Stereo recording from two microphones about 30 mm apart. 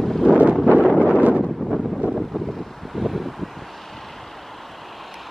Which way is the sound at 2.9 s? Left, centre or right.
Centre.